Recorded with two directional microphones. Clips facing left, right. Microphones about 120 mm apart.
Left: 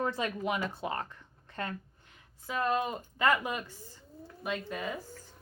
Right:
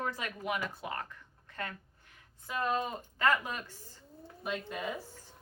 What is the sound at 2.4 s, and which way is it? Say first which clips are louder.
A woman's voice: left 2 dB; centre (ahead or behind).